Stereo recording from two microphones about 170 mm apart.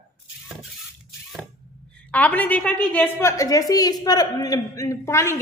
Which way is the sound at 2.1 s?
10° left (ahead or behind).